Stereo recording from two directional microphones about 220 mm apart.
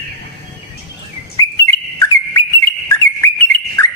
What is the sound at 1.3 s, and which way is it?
Bird, 15° left (ahead or behind).